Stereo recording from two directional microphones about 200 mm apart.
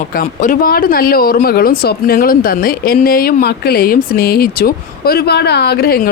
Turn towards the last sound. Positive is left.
turn(degrees=50)  # may be behind; listen again after turning